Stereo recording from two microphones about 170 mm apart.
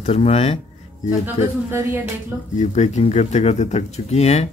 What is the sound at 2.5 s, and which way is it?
Speech, 45° left (ahead or behind).